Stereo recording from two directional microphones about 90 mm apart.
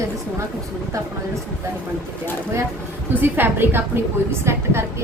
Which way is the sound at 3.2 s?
20° right (ahead or behind).